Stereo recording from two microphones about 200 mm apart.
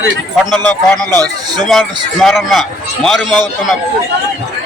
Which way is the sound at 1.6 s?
Centre (ahead or behind).